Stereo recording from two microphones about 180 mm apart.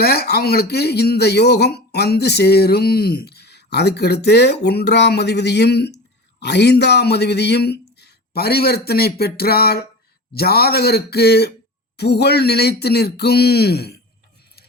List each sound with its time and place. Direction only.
0.0 s speech: 60° left (ahead or behind)